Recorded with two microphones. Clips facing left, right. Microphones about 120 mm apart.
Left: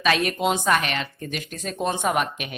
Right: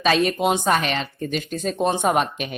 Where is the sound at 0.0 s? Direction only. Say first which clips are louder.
Right 3 dB; 30° right (ahead or behind).